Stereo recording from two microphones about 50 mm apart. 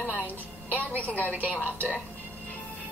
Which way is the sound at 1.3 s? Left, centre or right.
Right.